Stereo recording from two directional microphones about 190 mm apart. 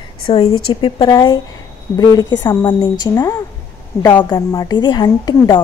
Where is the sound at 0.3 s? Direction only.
30° left (ahead or behind).